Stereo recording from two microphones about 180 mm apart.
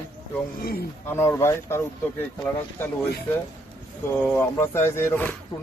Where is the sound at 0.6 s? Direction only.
55° left (ahead or behind).